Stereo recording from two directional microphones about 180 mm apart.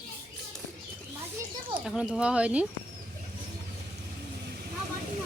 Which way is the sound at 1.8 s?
5° right (ahead or behind).